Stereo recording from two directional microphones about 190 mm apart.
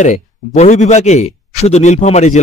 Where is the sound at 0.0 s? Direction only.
40° left (ahead or behind).